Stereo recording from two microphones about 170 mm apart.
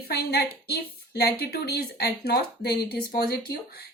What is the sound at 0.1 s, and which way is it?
Speech, 70° left (ahead or behind).